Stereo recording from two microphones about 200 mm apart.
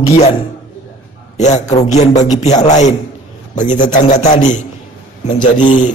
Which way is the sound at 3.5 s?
40° left (ahead or behind).